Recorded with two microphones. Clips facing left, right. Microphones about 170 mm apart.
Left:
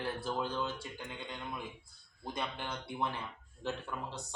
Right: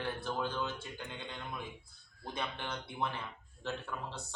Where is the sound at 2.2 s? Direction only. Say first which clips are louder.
Left 1 dB; 10° left (ahead or behind).